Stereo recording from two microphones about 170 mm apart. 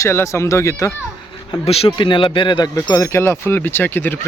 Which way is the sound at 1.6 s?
35° left (ahead or behind).